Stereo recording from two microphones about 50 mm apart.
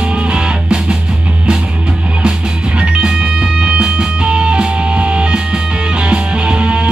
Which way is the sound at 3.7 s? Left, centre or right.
Centre.